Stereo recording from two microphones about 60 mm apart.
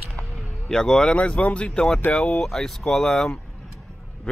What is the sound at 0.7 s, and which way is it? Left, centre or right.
Speech, centre.